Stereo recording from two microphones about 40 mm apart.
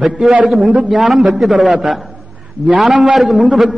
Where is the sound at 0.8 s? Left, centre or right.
Centre.